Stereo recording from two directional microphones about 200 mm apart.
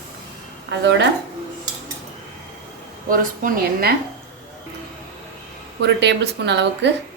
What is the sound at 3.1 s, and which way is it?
Speech, 45° right (ahead or behind).